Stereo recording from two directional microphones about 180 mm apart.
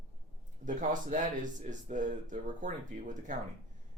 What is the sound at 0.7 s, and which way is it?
Speech, 45° right (ahead or behind).